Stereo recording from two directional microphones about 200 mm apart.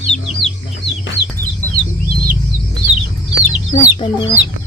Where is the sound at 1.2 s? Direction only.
60° left (ahead or behind).